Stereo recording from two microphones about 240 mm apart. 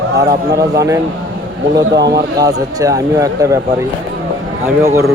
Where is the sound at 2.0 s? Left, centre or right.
Right.